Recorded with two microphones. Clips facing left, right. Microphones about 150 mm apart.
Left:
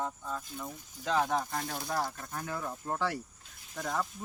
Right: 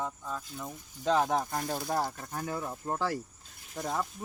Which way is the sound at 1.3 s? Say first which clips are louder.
Right 2 dB; 30° right (ahead or behind).